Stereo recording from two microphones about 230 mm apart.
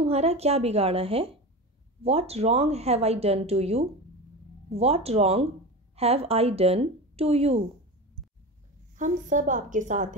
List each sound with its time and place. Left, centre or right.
0.0 s speech: right
8.9 s a woman's voice: right